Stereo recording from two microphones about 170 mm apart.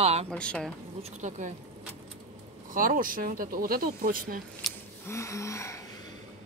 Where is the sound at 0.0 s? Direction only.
35° right (ahead or behind).